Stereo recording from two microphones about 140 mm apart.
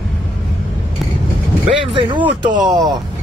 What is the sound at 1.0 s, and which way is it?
Vehicle, centre (ahead or behind).